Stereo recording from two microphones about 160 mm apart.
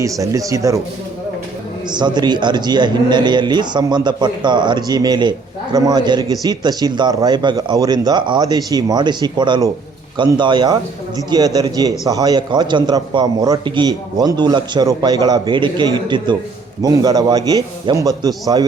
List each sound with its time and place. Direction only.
0.0 s a man's voice: 20° right (ahead or behind)
1.9 s a man's voice: 25° right (ahead or behind)